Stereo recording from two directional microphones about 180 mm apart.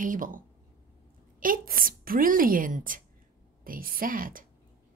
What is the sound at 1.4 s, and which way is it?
A woman's voice, 50° right (ahead or behind).